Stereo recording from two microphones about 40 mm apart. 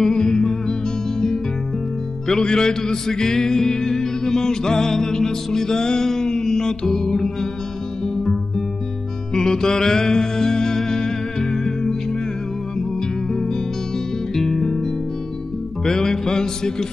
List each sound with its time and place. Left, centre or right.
0.0 s music: centre
2.2 s music: centre
13.3 s music: centre